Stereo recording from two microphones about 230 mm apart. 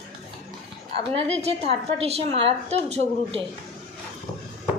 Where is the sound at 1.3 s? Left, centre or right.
Right.